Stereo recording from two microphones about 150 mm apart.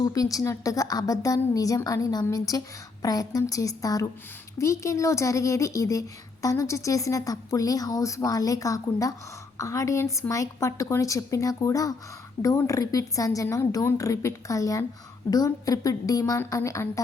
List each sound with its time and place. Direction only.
0.0 s speech: 25° left (ahead or behind)